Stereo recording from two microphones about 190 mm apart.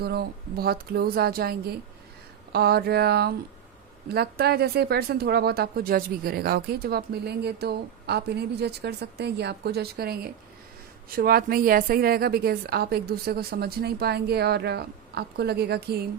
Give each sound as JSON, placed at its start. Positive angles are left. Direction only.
{"t": 0.0, "sound": "speech", "side_deg": -55}